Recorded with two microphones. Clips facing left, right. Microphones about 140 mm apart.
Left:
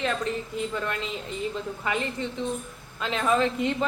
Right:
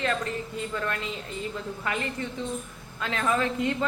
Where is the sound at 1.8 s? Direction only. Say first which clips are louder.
Left 2 dB; 20° left (ahead or behind).